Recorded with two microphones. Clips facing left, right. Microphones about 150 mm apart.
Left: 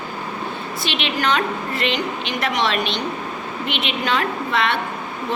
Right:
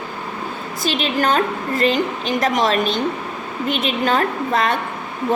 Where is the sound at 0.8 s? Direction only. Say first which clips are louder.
Right 4 dB; 40° right (ahead or behind).